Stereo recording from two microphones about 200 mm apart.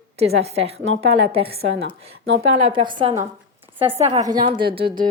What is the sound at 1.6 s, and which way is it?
Speech, 65° right (ahead or behind).